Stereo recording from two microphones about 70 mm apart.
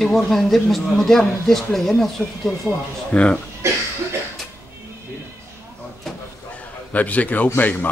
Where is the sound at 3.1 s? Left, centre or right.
Centre.